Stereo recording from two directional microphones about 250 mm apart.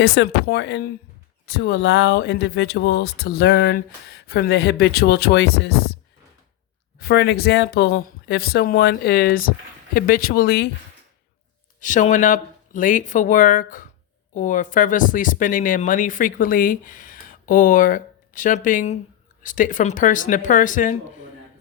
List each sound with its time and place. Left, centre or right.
0.0 s speech: left
7.0 s speech: left
11.8 s speech: left